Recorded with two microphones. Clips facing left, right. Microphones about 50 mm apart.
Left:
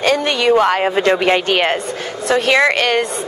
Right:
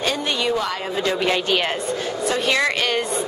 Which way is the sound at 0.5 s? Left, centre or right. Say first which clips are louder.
Left 10 dB; left.